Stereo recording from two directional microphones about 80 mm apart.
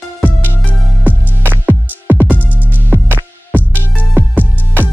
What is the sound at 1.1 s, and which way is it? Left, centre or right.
Music, right.